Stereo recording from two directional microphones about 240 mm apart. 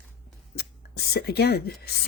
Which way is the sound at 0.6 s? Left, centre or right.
Left.